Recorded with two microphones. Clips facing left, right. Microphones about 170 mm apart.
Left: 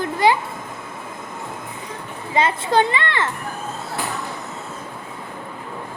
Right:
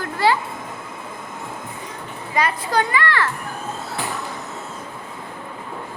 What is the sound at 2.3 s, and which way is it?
A child's voice, 25° left (ahead or behind).